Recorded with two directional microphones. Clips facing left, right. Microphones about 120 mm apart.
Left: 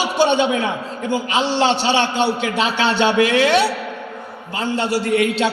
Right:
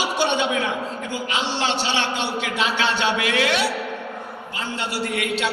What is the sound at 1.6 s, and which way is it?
Speech, 25° left (ahead or behind).